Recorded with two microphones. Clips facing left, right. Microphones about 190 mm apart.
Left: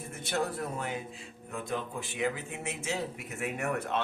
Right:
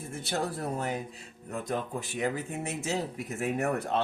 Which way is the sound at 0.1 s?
30° right (ahead or behind).